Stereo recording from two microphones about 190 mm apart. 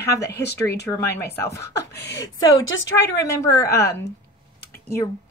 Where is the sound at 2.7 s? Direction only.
65° left (ahead or behind).